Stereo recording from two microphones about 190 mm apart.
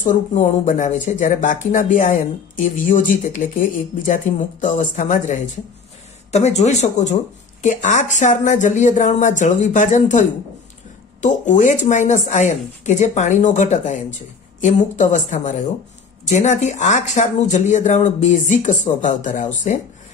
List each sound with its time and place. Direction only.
0.0 s speech: 40° left (ahead or behind)